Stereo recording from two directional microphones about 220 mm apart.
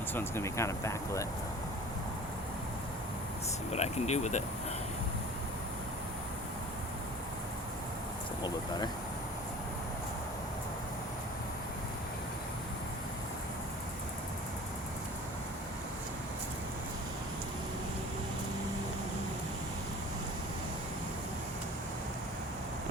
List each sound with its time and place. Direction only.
0.1 s speech: 10° left (ahead or behind)
3.7 s speech: 30° left (ahead or behind)
8.4 s speech: 20° left (ahead or behind)